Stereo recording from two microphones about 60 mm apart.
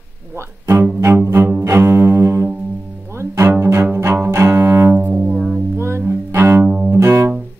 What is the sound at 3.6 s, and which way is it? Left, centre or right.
Cello, right.